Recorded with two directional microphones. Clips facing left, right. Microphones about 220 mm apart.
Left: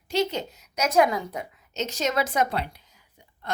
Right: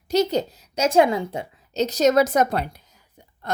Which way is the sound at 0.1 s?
40° right (ahead or behind).